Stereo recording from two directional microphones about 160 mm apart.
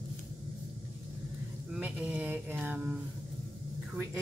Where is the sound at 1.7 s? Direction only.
5° right (ahead or behind).